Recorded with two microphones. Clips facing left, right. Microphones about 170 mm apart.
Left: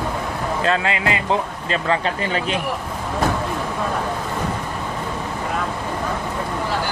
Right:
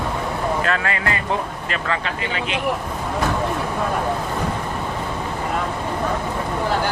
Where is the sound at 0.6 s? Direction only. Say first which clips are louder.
Left 2 dB; 25° left (ahead or behind).